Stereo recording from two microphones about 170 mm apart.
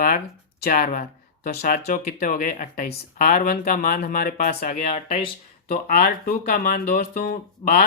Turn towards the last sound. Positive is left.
turn(degrees=55)  # may be behind; listen again after turning